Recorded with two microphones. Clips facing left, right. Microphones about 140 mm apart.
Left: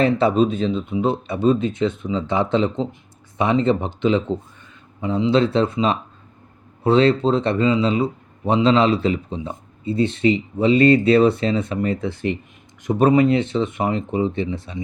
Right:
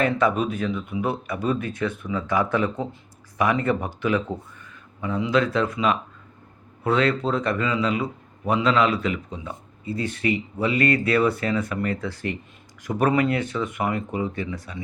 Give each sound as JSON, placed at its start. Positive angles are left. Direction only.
{"t": 0.0, "sound": "speech", "side_deg": 30}